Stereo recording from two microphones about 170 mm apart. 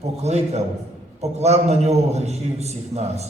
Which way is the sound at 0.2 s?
40° right (ahead or behind).